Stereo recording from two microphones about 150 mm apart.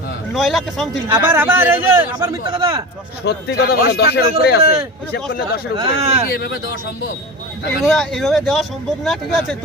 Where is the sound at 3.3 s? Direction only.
90° left.